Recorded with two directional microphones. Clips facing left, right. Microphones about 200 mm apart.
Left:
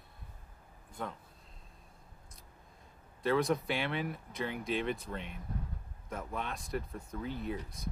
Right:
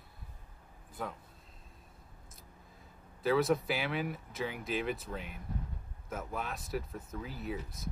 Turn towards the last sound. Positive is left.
turn(degrees=0)  # may be behind; listen again after turning